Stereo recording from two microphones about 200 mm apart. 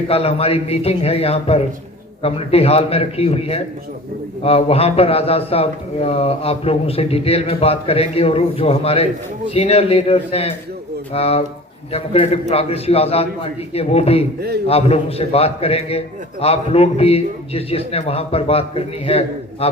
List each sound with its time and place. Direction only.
0.1 s a man's voice: 30° left (ahead or behind)